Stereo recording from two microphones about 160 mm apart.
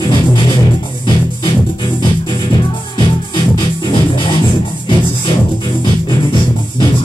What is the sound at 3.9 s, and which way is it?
Music, 30° left (ahead or behind).